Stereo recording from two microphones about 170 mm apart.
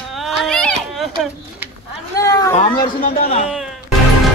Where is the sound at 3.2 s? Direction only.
40° left (ahead or behind).